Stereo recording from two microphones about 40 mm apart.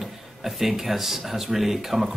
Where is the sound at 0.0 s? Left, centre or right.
Centre.